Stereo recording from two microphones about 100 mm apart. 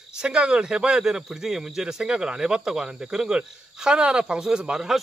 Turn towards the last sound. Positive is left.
turn(degrees=-5)  # may be behind; listen again after turning